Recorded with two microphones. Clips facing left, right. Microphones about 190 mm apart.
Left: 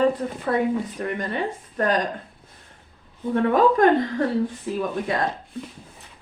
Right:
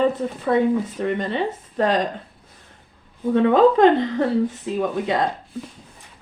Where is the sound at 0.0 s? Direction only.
25° right (ahead or behind).